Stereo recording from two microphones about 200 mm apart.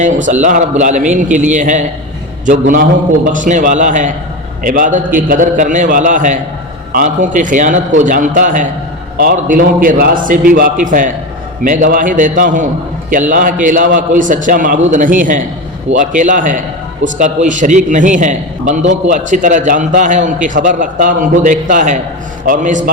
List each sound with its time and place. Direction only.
0.0 s a man's voice: 40° right (ahead or behind)